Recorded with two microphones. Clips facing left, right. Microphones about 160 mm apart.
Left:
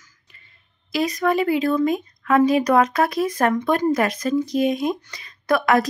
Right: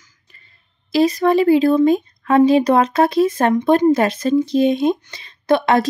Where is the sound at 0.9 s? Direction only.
30° right (ahead or behind).